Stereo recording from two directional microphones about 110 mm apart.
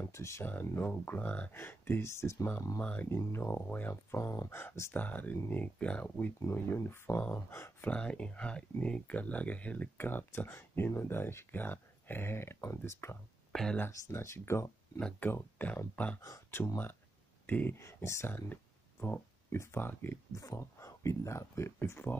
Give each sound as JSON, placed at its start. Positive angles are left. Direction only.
{"t": 0.0, "sound": "speech", "side_deg": 25}
{"t": 2.8, "sound": "speech", "side_deg": 15}
{"t": 7.9, "sound": "speech", "side_deg": 10}
{"t": 13.5, "sound": "speech", "side_deg": 5}
{"t": 13.7, "sound": "speech", "side_deg": 20}
{"t": 15.0, "sound": "speech", "side_deg": 5}
{"t": 15.2, "sound": "speech", "side_deg": 15}
{"t": 16.2, "sound": "speech", "side_deg": 30}